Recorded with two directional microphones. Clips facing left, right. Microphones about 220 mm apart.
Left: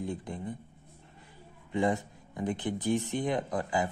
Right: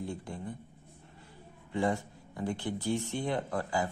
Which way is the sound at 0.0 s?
20° left (ahead or behind).